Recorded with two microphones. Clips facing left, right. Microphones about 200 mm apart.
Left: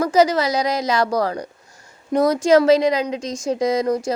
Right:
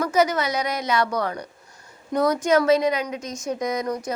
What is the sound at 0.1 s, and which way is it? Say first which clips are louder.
A woman's voice: left 5 dB; 30° left (ahead or behind).